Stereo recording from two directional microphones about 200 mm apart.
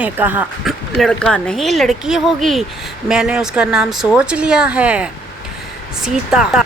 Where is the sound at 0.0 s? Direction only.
10° right (ahead or behind).